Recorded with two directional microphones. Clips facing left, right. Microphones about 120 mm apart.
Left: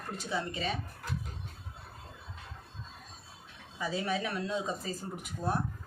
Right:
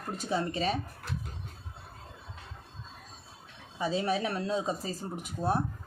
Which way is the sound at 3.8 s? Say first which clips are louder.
Right 4 dB; 25° right (ahead or behind).